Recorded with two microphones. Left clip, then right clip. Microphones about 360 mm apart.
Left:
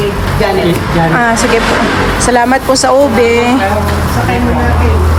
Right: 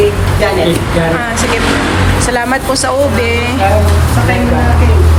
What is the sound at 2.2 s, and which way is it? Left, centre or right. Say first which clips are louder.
Speech: left 7 dB; centre.